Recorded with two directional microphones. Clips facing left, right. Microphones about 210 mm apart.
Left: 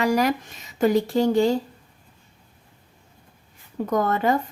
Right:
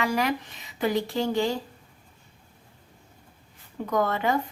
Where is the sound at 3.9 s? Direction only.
45° left (ahead or behind).